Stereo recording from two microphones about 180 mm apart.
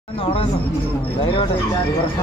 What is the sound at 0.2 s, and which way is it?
Speech, 30° left (ahead or behind).